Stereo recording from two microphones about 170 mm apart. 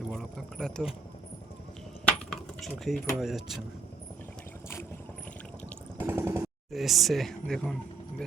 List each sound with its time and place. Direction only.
0.1 s speech: centre (ahead or behind)
2.0 s coin: centre (ahead or behind)
3.2 s speech: centre (ahead or behind)
6.0 s a sound: 15° right (ahead or behind)
6.7 s speech: centre (ahead or behind)